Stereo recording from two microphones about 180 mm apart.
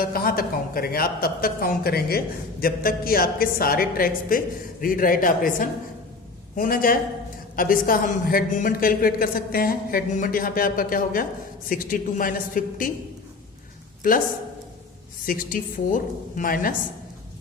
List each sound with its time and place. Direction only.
0.0 s a man's voice: 55° left (ahead or behind)
15.3 s a man's voice: 50° left (ahead or behind)